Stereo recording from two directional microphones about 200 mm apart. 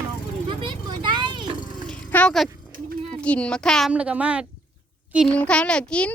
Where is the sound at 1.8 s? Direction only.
5° left (ahead or behind).